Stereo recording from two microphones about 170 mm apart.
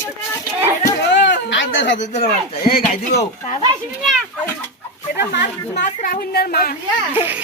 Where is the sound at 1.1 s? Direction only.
90° left.